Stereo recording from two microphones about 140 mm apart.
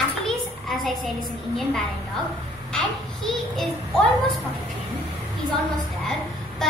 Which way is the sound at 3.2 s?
5° left (ahead or behind).